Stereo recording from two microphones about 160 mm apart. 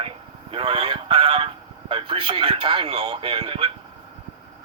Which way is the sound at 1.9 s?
35° right (ahead or behind).